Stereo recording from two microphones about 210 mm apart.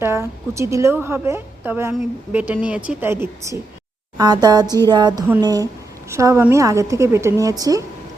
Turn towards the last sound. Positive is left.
turn(degrees=-15)  # may be behind; listen again after turning